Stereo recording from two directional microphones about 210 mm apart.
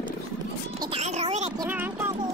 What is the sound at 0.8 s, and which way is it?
Music, 25° right (ahead or behind).